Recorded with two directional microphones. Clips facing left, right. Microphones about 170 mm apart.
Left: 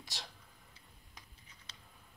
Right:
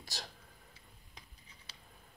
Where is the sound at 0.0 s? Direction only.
40° right (ahead or behind).